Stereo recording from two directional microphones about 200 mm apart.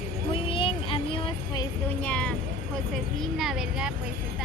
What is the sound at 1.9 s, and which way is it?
Speech, 10° left (ahead or behind).